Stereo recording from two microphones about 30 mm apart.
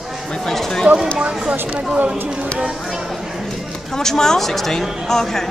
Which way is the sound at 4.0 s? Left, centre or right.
Centre.